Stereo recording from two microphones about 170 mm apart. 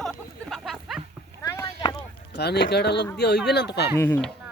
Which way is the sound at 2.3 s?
75° left (ahead or behind).